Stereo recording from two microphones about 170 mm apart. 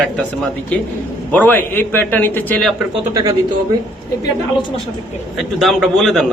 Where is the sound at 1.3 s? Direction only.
10° left (ahead or behind).